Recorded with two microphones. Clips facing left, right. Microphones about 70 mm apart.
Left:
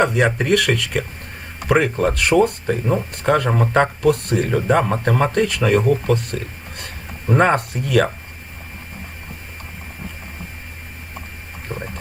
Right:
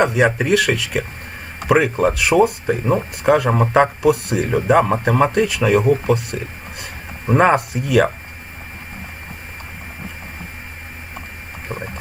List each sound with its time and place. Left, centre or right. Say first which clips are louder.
0.0 s speech: right 1 dB; centre
11.7 s pig: right 1 dB; centre